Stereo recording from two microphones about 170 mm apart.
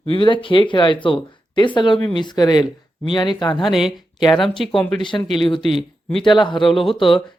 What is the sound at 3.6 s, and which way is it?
Speech, centre (ahead or behind).